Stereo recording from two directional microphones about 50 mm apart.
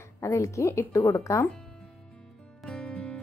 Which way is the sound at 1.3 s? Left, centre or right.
Left.